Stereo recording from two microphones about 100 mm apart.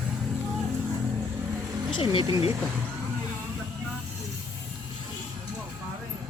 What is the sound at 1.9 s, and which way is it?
Speech, 55° left (ahead or behind).